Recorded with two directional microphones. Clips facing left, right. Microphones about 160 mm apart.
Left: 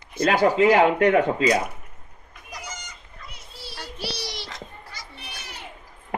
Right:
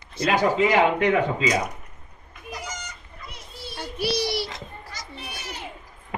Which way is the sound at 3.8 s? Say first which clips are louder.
Right 8 dB; 15° right (ahead or behind).